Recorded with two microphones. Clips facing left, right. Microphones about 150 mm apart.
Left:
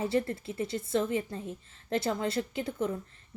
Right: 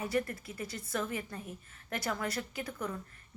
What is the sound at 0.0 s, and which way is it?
A woman's voice, 25° left (ahead or behind).